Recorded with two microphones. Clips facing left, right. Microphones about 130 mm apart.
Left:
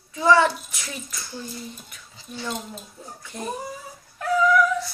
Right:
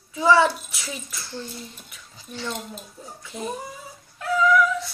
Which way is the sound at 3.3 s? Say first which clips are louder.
Right 1 dB; 5° right (ahead or behind).